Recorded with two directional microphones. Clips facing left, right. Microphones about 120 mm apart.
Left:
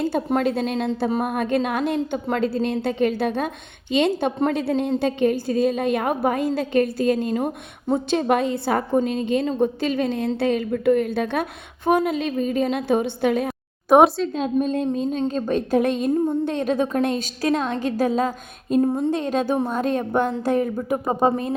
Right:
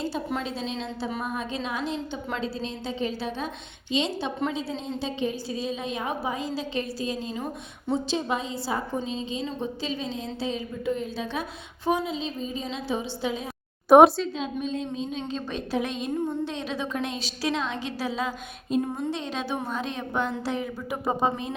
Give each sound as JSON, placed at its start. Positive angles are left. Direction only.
{"t": 0.3, "sound": "a woman's voice", "side_deg": 55}
{"t": 13.9, "sound": "speech", "side_deg": 0}
{"t": 14.3, "sound": "a sound", "side_deg": 50}